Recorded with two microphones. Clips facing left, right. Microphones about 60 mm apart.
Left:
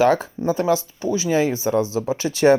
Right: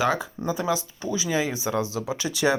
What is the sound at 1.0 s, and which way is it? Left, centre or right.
Speech, left.